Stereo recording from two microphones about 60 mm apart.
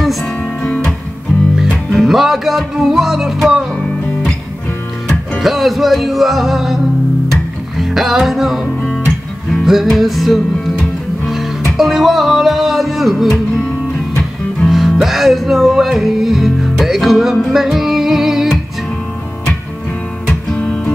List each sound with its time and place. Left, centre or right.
0.6 s guitar: centre
1.6 s music: centre
5.4 s music: centre
7.8 s music: centre
8.8 s music: centre
9.7 s music: centre
11.7 s music: centre
14.7 s music: centre
20.5 s guitar: left